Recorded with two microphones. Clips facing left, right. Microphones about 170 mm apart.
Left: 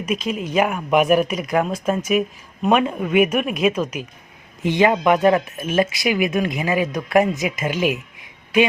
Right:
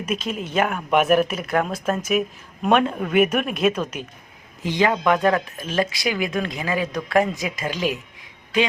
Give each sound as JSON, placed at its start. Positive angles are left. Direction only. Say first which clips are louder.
{"t": 0.1, "sound": "speech", "louder": "left 3 dB", "side_deg": 5}
{"t": 4.6, "sound": "speech", "louder": "left 3 dB", "side_deg": 20}